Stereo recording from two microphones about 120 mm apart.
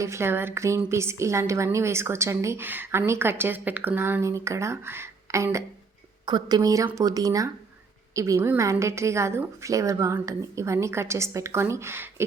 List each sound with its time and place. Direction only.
0.0 s a woman's voice: 20° right (ahead or behind)
6.2 s a woman's voice: 35° right (ahead or behind)